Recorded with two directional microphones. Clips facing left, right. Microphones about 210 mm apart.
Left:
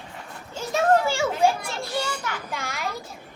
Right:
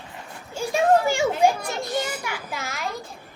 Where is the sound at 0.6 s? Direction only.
15° right (ahead or behind).